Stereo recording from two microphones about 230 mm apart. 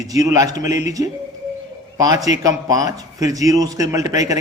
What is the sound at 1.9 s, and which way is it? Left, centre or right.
A man's voice, centre.